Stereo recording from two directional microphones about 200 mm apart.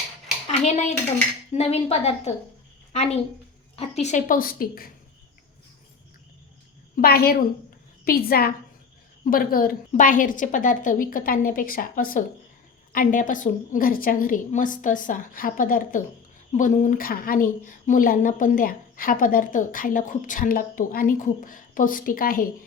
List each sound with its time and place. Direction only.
0.6 s a woman's voice: 35° left (ahead or behind)
3.8 s a woman's voice: 35° left (ahead or behind)
6.9 s a woman's voice: 50° left (ahead or behind)